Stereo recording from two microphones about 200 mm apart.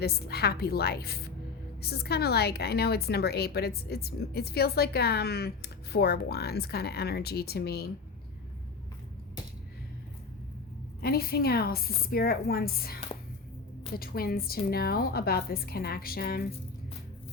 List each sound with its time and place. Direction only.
0.0 s a woman's voice: 50° left (ahead or behind)
11.0 s a woman's voice: 50° left (ahead or behind)